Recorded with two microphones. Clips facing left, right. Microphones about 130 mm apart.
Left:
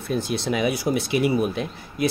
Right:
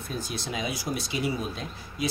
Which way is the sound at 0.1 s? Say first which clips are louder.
Left 10 dB; 60° left (ahead or behind).